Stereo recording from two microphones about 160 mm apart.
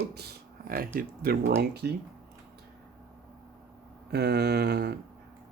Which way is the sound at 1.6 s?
90° right.